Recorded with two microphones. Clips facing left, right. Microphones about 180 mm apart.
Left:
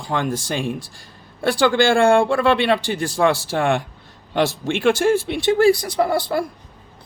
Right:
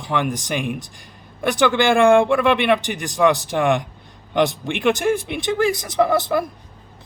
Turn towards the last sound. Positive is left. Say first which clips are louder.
# right 2 dB
turn(degrees=-20)  # may be behind; listen again after turning